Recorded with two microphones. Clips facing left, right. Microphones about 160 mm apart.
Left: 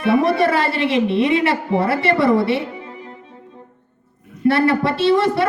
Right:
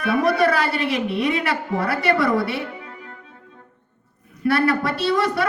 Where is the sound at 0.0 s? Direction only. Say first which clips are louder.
Left 3 dB; 25° left (ahead or behind).